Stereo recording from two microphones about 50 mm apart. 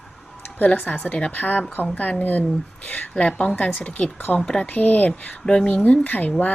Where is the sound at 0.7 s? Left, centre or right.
Left.